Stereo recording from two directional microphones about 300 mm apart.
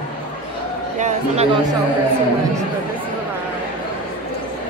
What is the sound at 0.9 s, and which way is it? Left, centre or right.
Speech, right.